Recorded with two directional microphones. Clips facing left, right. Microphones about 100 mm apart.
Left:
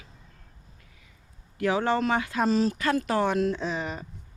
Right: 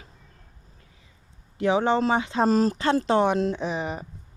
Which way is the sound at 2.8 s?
30° right (ahead or behind).